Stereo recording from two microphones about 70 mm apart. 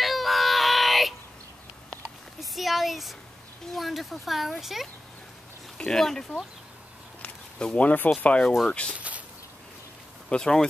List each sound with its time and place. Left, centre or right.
0.0 s child singing: centre
2.0 s a sound: centre
3.7 s speech: centre
7.2 s a sound: centre
8.2 s speech: centre
10.3 s speech: centre